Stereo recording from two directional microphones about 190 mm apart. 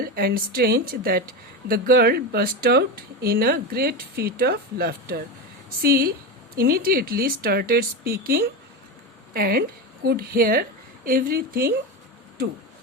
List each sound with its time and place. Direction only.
0.0 s a woman's voice: 55° right (ahead or behind)